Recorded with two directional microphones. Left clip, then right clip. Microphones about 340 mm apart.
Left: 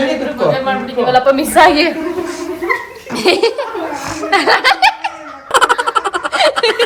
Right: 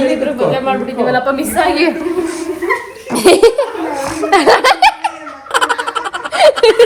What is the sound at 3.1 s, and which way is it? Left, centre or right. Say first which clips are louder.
Laughter: right 5 dB; centre.